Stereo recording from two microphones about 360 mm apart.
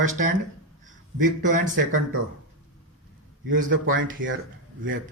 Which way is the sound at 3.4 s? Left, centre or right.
Right.